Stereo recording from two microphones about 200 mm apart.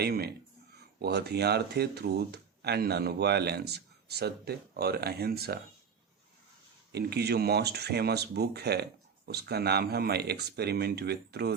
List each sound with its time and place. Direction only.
0.0 s speech: 50° right (ahead or behind)
6.9 s speech: 55° right (ahead or behind)